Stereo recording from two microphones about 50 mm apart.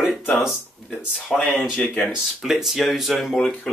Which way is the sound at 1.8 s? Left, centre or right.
Left.